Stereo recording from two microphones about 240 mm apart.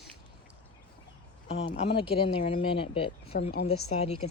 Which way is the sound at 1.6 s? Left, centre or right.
Left.